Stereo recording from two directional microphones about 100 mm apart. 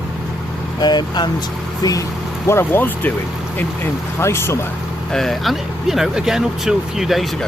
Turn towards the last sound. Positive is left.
turn(degrees=0)  # may be behind; listen again after turning